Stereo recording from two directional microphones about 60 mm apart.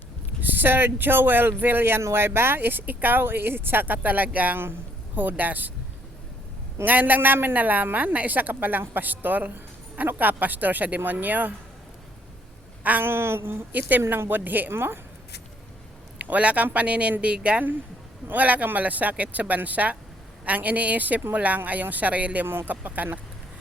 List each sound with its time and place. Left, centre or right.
0.4 s speech: right
2.0 s speech: right
6.8 s speech: right
12.8 s a sound: right
13.1 s a sound: right
13.7 s speech: right
16.1 s a man's voice: right